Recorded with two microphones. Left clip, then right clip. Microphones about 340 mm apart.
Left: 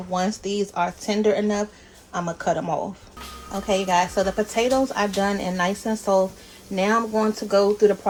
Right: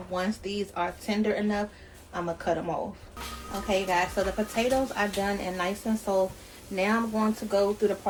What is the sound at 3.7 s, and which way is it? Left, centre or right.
Speech, left.